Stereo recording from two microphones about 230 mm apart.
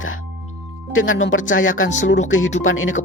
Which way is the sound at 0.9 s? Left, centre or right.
Left.